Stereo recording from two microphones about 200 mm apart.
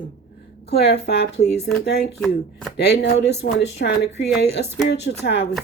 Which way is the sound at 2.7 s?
55° left (ahead or behind).